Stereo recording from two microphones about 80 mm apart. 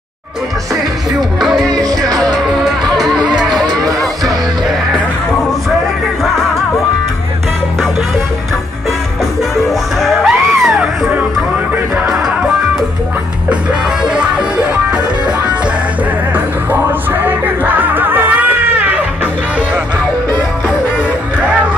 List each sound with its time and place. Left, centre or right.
1.4 s music: centre
1.8 s music: right
2.6 s music: centre
9.7 s music: centre
14.0 s music: centre
17.2 s music: right